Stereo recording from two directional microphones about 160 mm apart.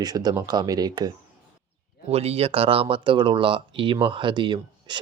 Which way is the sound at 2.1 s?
40° right (ahead or behind).